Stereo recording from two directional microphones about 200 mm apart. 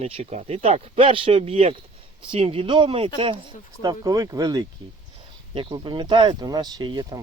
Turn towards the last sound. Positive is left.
turn(degrees=-20)  # may be behind; listen again after turning